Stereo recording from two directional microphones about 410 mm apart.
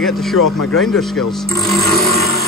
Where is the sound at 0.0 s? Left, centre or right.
Centre.